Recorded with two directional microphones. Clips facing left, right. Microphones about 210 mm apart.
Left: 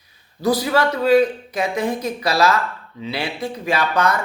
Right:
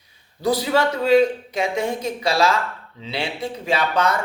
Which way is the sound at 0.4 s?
25° right (ahead or behind).